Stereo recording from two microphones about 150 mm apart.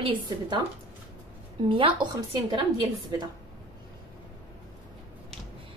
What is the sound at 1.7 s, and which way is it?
Speech, 35° right (ahead or behind).